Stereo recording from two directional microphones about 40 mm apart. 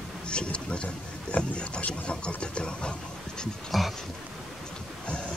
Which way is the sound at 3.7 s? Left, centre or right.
Centre.